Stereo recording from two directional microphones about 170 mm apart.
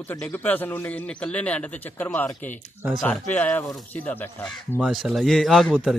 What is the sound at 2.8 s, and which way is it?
Speech, centre (ahead or behind).